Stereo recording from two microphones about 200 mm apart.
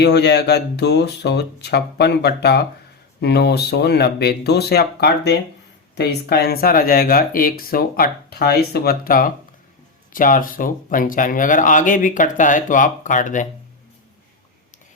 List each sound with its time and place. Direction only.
0.0 s speech: 55° left (ahead or behind); by 13.5 s 40° left (ahead or behind)